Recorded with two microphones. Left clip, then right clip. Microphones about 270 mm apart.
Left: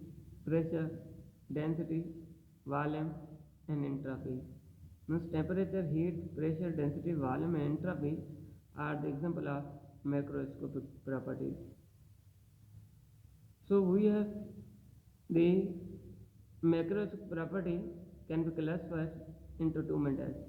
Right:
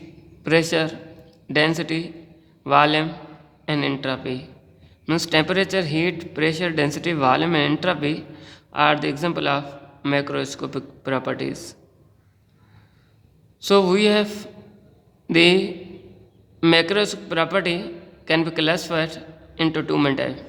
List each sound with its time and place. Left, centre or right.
0.5 s a man's voice: right
13.7 s a man's voice: right
15.3 s a man's voice: right
16.6 s a man's voice: right